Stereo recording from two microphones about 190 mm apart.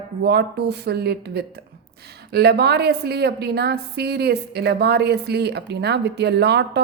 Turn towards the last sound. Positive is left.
turn(degrees=-60)  # may be behind; listen again after turning